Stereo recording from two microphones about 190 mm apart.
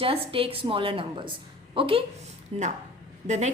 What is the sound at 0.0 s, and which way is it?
A woman's voice, 30° right (ahead or behind).